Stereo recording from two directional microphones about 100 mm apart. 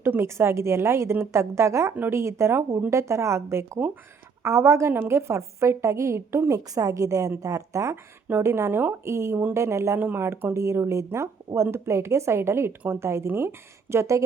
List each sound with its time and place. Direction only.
0.0 s a woman's voice: 25° right (ahead or behind)